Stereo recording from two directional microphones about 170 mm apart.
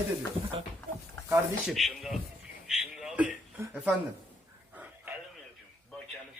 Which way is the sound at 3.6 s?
15° right (ahead or behind).